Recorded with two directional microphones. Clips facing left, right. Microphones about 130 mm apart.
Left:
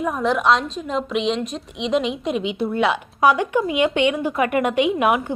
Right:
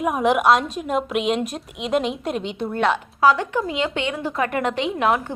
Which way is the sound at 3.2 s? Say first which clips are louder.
Left 2 dB; 15° left (ahead or behind).